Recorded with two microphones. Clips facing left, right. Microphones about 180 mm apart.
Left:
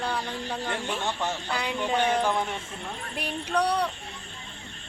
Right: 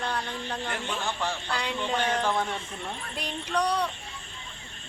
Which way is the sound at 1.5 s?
10° left (ahead or behind).